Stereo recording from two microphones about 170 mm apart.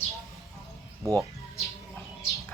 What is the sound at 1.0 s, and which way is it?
Speech, 20° right (ahead or behind).